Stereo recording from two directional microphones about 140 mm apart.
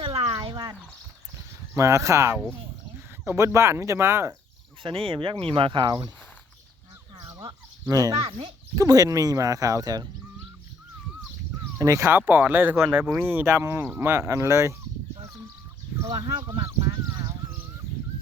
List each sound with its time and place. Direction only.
0.0 s a sound: 40° right (ahead or behind)
1.7 s speech: 20° right (ahead or behind)
4.8 s speech: 40° right (ahead or behind)
7.4 s speech: 25° right (ahead or behind)
8.2 s speech: 40° right (ahead or behind)
8.7 s speech: 25° right (ahead or behind)
11.8 s speech: 20° right (ahead or behind)
16.0 s speech: 25° right (ahead or behind)